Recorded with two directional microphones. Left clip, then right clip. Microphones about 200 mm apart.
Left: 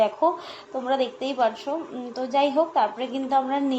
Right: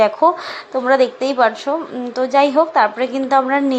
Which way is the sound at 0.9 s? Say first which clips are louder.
Right 10 dB; 20° right (ahead or behind).